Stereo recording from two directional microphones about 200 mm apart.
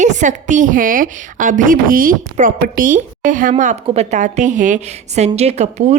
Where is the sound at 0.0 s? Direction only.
40° right (ahead or behind).